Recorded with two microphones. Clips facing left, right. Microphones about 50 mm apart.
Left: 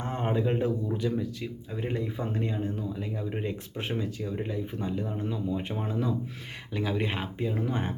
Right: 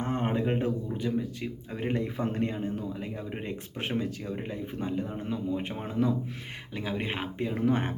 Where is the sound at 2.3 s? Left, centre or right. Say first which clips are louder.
Right 1 dB; right.